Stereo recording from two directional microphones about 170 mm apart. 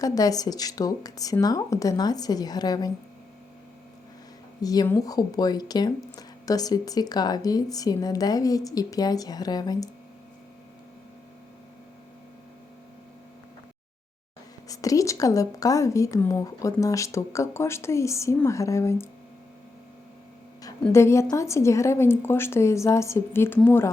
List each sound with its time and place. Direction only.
0.0 s speech: 20° left (ahead or behind)
4.6 s speech: 20° left (ahead or behind)
14.7 s speech: 20° left (ahead or behind)
20.9 s speech: 15° left (ahead or behind)